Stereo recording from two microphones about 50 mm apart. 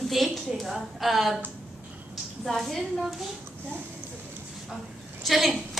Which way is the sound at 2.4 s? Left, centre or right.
Centre.